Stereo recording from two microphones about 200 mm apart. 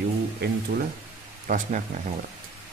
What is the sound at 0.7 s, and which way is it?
Speech, 45° right (ahead or behind).